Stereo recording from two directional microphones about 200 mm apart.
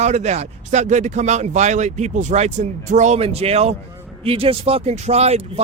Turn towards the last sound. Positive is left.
turn(degrees=-30)  # may be behind; listen again after turning